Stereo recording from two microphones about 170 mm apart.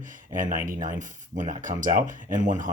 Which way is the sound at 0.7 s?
50° right (ahead or behind).